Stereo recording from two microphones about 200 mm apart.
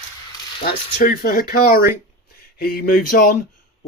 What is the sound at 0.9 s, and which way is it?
Speech, 45° left (ahead or behind).